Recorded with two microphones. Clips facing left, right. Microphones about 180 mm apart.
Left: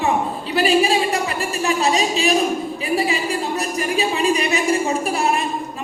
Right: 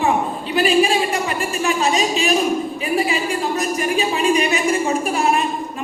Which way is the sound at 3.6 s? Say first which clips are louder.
Right 1 dB; 35° left (ahead or behind).